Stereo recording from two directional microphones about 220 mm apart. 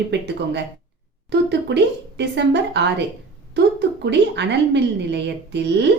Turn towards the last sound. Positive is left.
turn(degrees=-50)  # may be behind; listen again after turning